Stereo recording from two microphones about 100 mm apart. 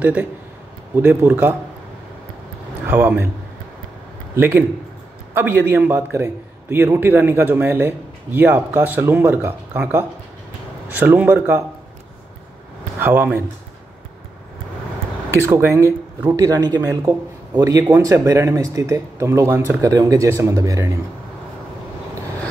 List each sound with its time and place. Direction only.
0.0 s a man's voice: 15° right (ahead or behind)
2.9 s a man's voice: 20° right (ahead or behind)
4.4 s a man's voice: 20° right (ahead or behind)
13.0 s a man's voice: 20° right (ahead or behind)
15.3 s a man's voice: 25° right (ahead or behind)